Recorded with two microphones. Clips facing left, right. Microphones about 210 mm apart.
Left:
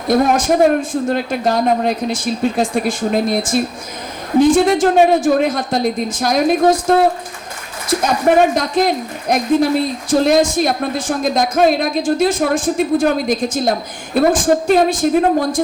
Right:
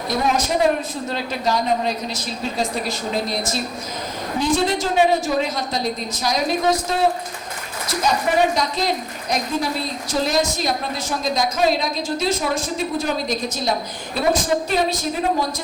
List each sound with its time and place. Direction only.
0.1 s speech: 50° left (ahead or behind)